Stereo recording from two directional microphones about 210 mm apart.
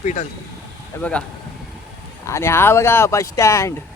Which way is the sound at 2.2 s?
15° left (ahead or behind).